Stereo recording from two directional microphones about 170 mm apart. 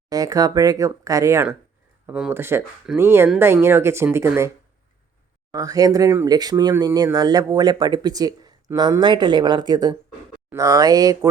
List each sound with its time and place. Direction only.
0.1 s speech: 20° right (ahead or behind)